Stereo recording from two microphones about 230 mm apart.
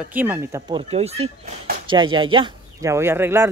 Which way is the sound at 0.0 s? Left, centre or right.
Centre.